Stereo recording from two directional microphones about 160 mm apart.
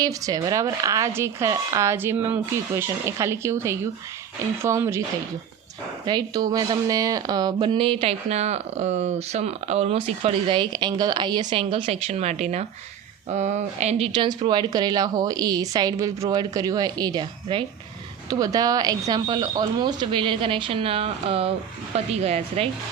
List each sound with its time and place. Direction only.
0.0 s speech: 20° right (ahead or behind)
6.1 s a woman's voice: 25° right (ahead or behind); by 14.1 s 45° right (ahead or behind)
14.1 s a woman's voice: 30° right (ahead or behind)